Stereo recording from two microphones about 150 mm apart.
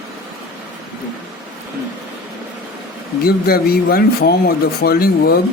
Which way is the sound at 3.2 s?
90° left.